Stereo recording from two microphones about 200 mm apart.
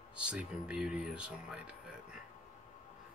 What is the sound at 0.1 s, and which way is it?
Speech, 5° right (ahead or behind).